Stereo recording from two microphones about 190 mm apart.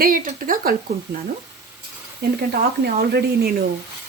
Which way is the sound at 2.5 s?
55° right (ahead or behind).